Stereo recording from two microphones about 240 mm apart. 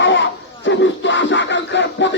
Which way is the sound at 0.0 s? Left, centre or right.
Left.